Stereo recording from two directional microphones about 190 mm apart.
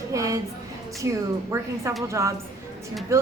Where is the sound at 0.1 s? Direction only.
15° right (ahead or behind).